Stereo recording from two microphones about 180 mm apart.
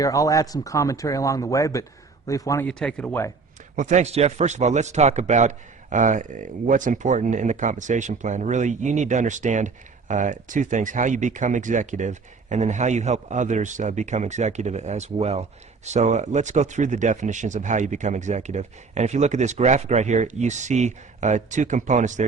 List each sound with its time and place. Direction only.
0.0 s speech: 20° left (ahead or behind)
2.6 s speech: 5° left (ahead or behind)
3.8 s a man's voice: 40° right (ahead or behind)